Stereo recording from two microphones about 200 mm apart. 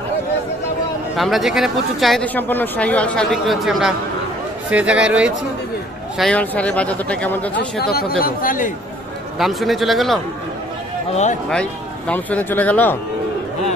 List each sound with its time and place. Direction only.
1.1 s speech: centre (ahead or behind)
7.8 s a man's voice: 50° left (ahead or behind)
9.4 s speech: centre (ahead or behind)
12.1 s speech: 10° left (ahead or behind)